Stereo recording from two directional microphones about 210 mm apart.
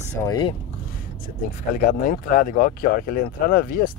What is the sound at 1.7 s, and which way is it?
Speech, 40° left (ahead or behind).